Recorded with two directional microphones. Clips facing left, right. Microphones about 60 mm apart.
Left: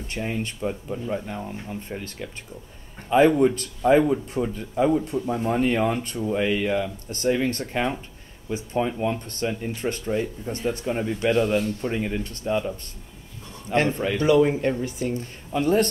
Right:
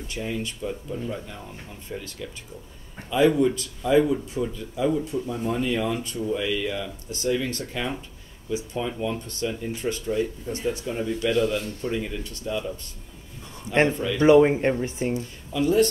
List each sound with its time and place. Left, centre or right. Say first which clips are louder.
0.1 s speech: left 2 dB; left
13.9 s speech: left 2 dB; left
14.2 s speech: right 3 dB; right
15.1 s speech: even; left